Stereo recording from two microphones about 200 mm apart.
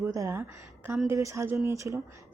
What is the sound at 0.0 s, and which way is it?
Speech, 15° right (ahead or behind).